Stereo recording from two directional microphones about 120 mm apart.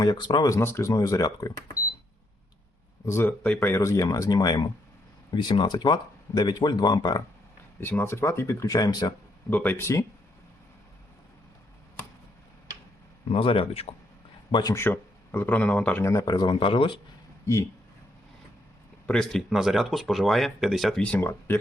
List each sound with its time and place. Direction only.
0.0 s speech: 40° left (ahead or behind)
0.4 s speech: 25° left (ahead or behind)
3.1 s speech: 20° left (ahead or behind); by 7.2 s 35° left (ahead or behind)
7.8 s speech: 15° left (ahead or behind); by 9.1 s 35° left (ahead or behind)
9.5 s speech: 15° left (ahead or behind)
13.3 s speech: 50° left (ahead or behind)
14.5 s speech: 30° left (ahead or behind)
14.8 s speech: 15° left (ahead or behind)
16.0 s speech: 25° left (ahead or behind); by 17.0 s 45° left (ahead or behind)
17.4 s speech: 25° left (ahead or behind)
19.0 s speech: 5° left (ahead or behind)
21.0 s speech: 15° left (ahead or behind)